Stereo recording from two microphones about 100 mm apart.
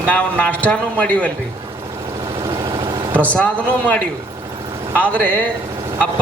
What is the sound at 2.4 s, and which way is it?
Vehicle, 45° right (ahead or behind).